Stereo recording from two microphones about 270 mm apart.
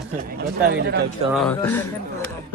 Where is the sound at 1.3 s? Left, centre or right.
Centre.